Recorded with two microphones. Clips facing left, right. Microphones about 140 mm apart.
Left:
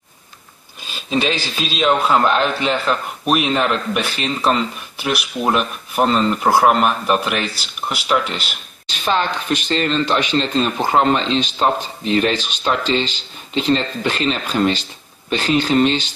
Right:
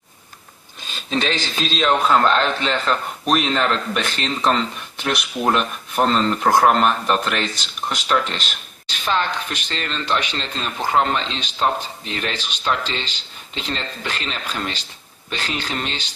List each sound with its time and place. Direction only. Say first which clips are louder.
0.9 s a man's voice: left 3 dB; 10° left (ahead or behind)
9.0 s a woman's voice: left 3 dB; 20° left (ahead or behind)